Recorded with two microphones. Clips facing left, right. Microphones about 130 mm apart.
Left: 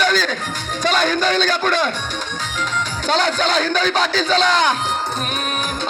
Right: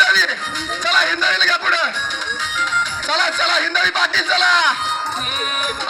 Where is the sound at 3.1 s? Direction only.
35° left (ahead or behind).